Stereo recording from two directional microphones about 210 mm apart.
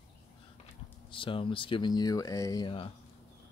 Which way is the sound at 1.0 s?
25° left (ahead or behind).